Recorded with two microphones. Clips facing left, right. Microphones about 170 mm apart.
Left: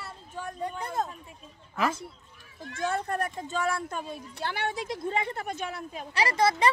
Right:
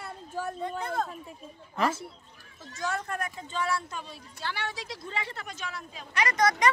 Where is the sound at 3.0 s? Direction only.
35° left (ahead or behind); by 6.0 s 55° left (ahead or behind).